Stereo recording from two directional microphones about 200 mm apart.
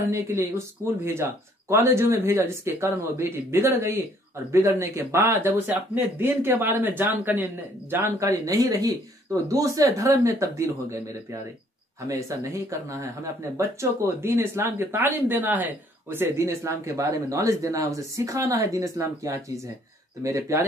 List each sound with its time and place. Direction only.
0.1 s speech: 15° right (ahead or behind)